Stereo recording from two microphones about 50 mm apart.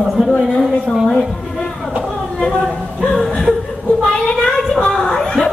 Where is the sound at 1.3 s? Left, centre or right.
Centre.